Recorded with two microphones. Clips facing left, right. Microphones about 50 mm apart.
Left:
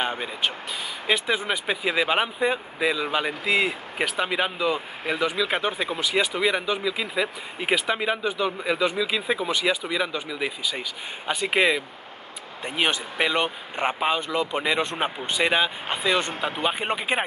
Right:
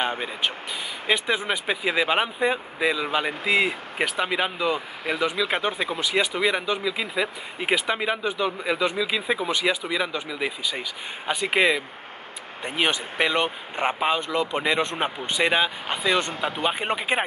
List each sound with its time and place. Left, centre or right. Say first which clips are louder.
0.0 s speech: right 1 dB; centre
16.3 s speech: right 1 dB; left
16.6 s speech: even; centre